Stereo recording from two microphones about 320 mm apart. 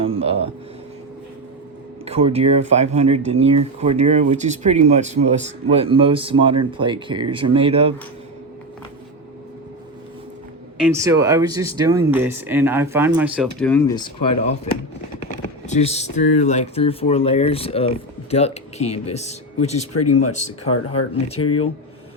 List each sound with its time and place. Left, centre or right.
0.0 s a sound: centre
2.0 s speech: centre
10.8 s speech: centre
19.9 s speech: left
21.3 s speech: left